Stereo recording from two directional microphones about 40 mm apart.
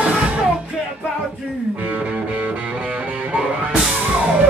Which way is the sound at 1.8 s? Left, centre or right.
Right.